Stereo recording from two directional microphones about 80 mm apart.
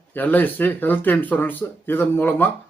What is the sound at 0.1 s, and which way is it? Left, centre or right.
Speech, left.